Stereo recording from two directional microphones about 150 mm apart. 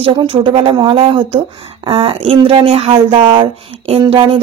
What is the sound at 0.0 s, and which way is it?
Music, 35° right (ahead or behind).